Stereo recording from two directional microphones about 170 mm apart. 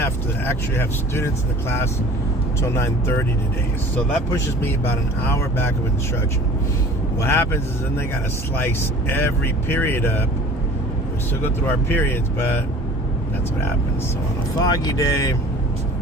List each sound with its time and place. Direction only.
0.0 s speech: 15° left (ahead or behind)
2.6 s speech: 15° left (ahead or behind)
7.2 s speech: 15° left (ahead or behind)
11.6 s speech: 10° left (ahead or behind)
14.6 s speech: 20° left (ahead or behind)